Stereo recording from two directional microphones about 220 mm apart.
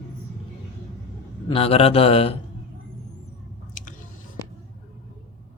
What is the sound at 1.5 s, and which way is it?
Speech, 25° left (ahead or behind).